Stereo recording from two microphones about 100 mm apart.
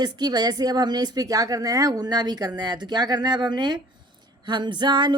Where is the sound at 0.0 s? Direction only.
45° right (ahead or behind).